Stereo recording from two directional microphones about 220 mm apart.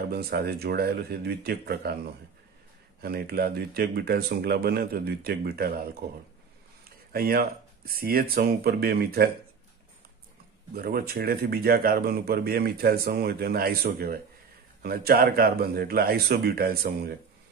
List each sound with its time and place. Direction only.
0.1 s speech: 45° right (ahead or behind)
3.0 s speech: 45° right (ahead or behind)
10.7 s speech: 45° right (ahead or behind)